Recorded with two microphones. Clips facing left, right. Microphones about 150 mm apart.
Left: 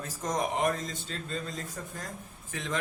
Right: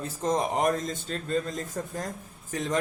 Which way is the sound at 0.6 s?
45° right (ahead or behind).